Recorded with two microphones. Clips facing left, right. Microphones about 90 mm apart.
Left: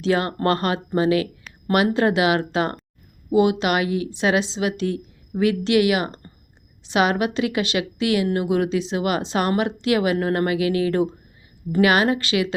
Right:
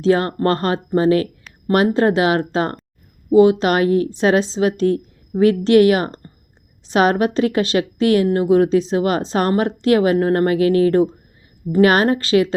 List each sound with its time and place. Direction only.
0.0 s a woman's voice: 35° right (ahead or behind)